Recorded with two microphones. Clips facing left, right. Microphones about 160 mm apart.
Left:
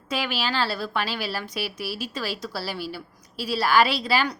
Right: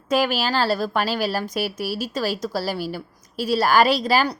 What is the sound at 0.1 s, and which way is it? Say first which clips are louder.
A woman's voice: right 7 dB; 45° right (ahead or behind).